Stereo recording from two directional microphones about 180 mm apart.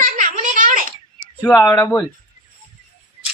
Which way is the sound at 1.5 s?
15° left (ahead or behind).